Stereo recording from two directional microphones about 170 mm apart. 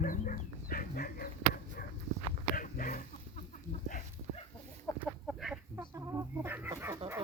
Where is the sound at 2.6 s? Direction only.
50° left (ahead or behind).